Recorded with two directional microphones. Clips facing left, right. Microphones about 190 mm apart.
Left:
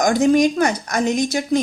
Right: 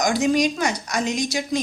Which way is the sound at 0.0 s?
50° left (ahead or behind).